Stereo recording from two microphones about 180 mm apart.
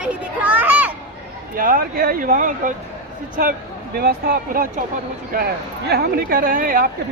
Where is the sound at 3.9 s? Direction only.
55° right (ahead or behind).